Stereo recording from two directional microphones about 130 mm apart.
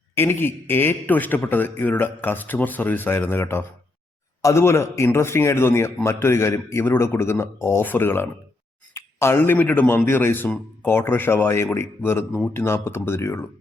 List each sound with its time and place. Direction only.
0.1 s a man's voice: 15° left (ahead or behind)